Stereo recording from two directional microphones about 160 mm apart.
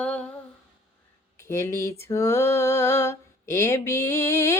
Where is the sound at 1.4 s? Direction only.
20° left (ahead or behind).